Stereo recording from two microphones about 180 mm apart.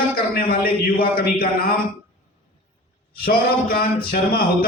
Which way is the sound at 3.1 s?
55° left (ahead or behind).